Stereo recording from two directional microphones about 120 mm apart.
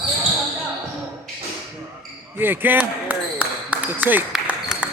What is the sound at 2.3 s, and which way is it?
Basketball bounce, 15° right (ahead or behind).